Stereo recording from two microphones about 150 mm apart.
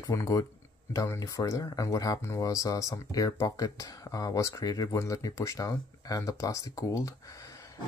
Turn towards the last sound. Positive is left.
turn(degrees=20)  # may be behind; listen again after turning